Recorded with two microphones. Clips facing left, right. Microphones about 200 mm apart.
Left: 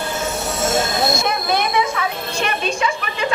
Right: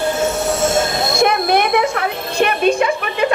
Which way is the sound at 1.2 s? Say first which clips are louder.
Right 6 dB; 60° right (ahead or behind).